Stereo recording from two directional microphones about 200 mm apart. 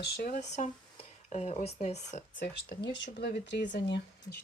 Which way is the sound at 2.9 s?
55° left (ahead or behind).